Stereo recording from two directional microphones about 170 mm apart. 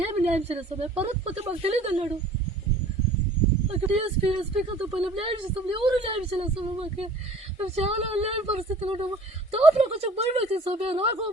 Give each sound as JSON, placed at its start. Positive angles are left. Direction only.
{"t": 0.0, "sound": "speech", "side_deg": -40}
{"t": 3.7, "sound": "speech", "side_deg": -35}